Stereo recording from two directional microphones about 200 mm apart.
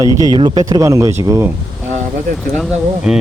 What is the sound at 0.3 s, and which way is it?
Speech, 20° right (ahead or behind).